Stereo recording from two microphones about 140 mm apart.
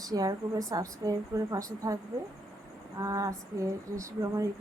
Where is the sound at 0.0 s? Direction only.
25° right (ahead or behind).